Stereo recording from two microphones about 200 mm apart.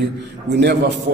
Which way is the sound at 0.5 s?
55° right (ahead or behind).